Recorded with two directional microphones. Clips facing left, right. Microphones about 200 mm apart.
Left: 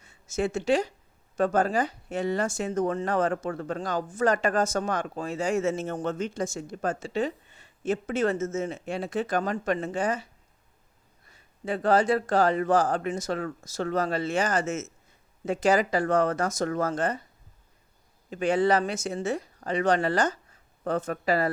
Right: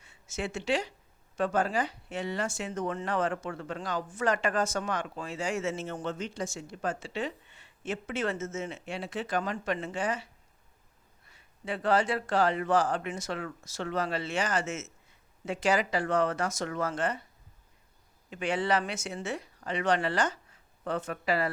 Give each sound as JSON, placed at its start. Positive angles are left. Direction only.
{"t": 0.0, "sound": "speech", "side_deg": 40}
{"t": 11.3, "sound": "a man's voice", "side_deg": 40}
{"t": 18.3, "sound": "a man's voice", "side_deg": 40}